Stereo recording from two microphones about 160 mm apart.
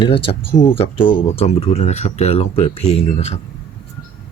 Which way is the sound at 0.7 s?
35° left (ahead or behind).